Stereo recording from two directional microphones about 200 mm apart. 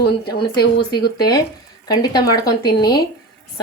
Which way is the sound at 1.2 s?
20° left (ahead or behind).